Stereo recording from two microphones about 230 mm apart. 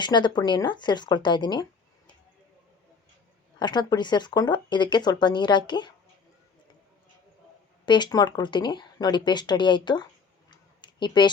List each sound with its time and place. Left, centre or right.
0.0 s speech: centre
3.6 s speech: centre
7.9 s speech: centre
10.5 s a sound: centre